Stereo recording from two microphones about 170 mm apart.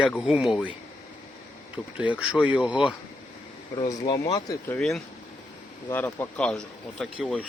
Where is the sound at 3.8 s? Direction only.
25° left (ahead or behind).